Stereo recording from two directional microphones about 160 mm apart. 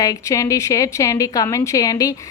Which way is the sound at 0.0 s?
20° left (ahead or behind).